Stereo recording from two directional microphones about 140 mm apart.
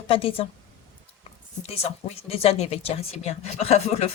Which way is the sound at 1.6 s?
45° left (ahead or behind).